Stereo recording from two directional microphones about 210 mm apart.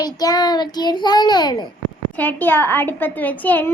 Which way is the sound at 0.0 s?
20° left (ahead or behind).